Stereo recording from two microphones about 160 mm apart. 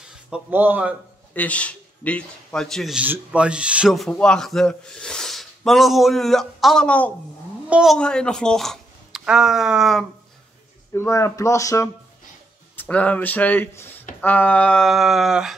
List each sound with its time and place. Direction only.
0.1 s speech: 10° right (ahead or behind)
1.3 s a man's voice: 10° left (ahead or behind)
10.9 s a man's voice: 15° left (ahead or behind); by 15.5 s 5° right (ahead or behind)